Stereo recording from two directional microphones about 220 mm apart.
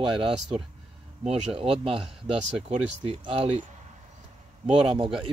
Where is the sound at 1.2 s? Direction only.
30° right (ahead or behind).